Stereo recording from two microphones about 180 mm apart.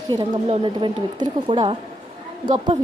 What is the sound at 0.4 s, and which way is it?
A woman's voice, 30° right (ahead or behind).